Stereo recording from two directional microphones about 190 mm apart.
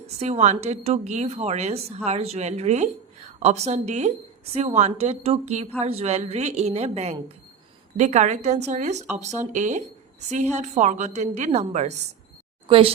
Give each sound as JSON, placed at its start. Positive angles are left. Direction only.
{"t": 0.2, "sound": "a woman's voice", "side_deg": -35}